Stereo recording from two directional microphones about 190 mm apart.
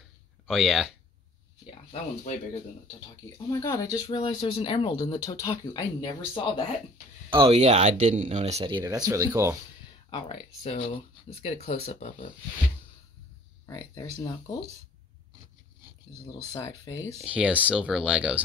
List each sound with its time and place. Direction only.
0.5 s speech: centre (ahead or behind)
3.4 s speech: 20° left (ahead or behind)
7.2 s speech: 25° right (ahead or behind)
10.0 s speech: 25° left (ahead or behind)
13.7 s speech: 20° left (ahead or behind)
16.3 s speech: 15° left (ahead or behind)
17.2 s speech: 5° right (ahead or behind)